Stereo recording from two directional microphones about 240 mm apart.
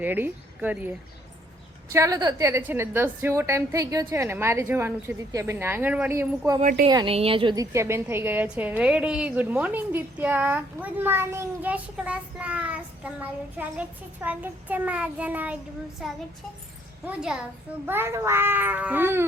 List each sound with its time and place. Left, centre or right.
0.0 s a woman's voice: centre
6.6 s a woman's voice: right
6.8 s a woman's voice: right